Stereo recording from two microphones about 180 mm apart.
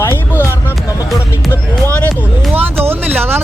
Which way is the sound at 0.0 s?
15° left (ahead or behind).